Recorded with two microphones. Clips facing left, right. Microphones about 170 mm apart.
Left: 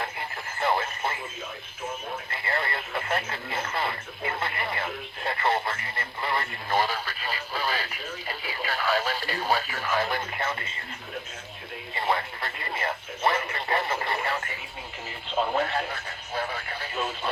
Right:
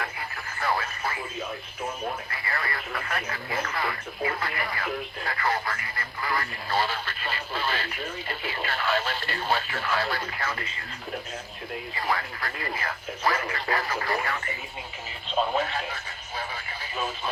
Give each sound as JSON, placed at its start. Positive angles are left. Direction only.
{"t": 0.6, "sound": "radio", "side_deg": 25}
{"t": 2.3, "sound": "radio", "side_deg": 25}
{"t": 4.4, "sound": "speech", "side_deg": 25}
{"t": 11.9, "sound": "speech", "side_deg": 25}
{"t": 15.3, "sound": "radio", "side_deg": -20}
{"t": 15.7, "sound": "radio", "side_deg": 60}